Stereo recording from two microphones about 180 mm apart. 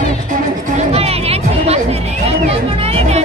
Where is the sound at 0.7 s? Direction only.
35° right (ahead or behind).